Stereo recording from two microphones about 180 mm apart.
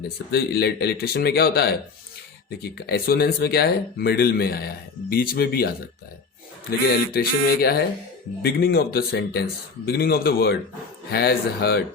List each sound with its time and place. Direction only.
0.3 s speech: 65° left (ahead or behind)
2.8 s speech: 60° left (ahead or behind)